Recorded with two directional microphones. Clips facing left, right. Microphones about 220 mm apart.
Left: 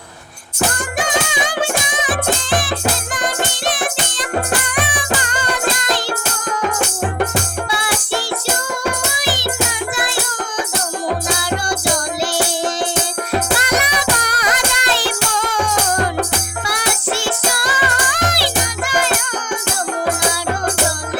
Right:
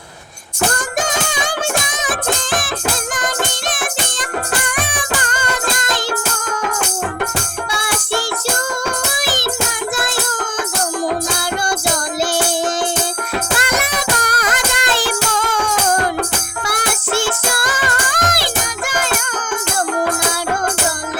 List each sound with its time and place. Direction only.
0.9 s music: 45° right (ahead or behind)
7.7 s music: 45° right (ahead or behind)
13.7 s music: 50° right (ahead or behind)
16.6 s music: 50° right (ahead or behind)